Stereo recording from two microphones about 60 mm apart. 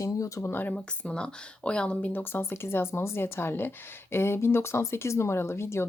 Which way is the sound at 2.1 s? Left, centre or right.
Left.